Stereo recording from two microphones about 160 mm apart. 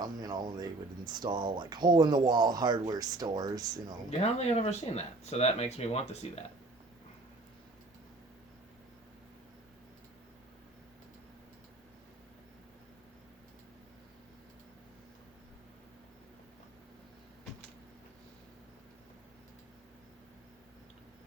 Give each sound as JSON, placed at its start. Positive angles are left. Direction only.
{"t": 0.0, "sound": "speech", "side_deg": -25}
{"t": 4.1, "sound": "speech", "side_deg": 40}